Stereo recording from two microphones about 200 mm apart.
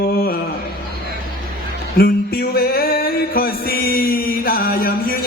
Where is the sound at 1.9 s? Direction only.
50° left (ahead or behind).